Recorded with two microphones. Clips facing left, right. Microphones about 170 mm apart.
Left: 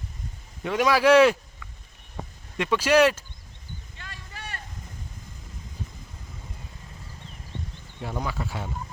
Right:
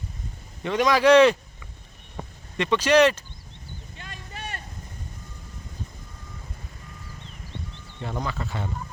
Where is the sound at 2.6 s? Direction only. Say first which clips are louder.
Right 1 dB; 5° left (ahead or behind).